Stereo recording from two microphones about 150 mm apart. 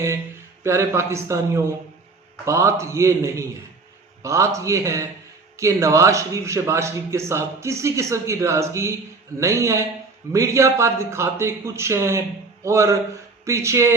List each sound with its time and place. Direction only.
0.6 s a man's voice: 20° right (ahead or behind)